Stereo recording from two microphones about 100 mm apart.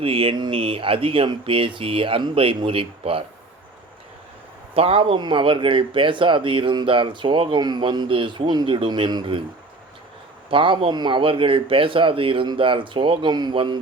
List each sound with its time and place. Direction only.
0.0 s speech: 65° right (ahead or behind)
4.7 s speech: 75° right (ahead or behind)
5.2 s speech: 55° right (ahead or behind)
7.6 s a man's voice: 45° right (ahead or behind)
10.5 s speech: 60° right (ahead or behind)